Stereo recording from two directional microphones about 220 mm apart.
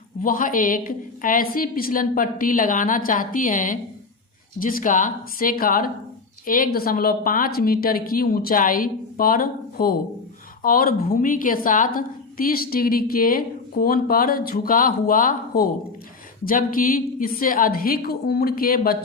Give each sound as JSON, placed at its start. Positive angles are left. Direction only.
{"t": 0.2, "sound": "a woman's voice", "side_deg": 40}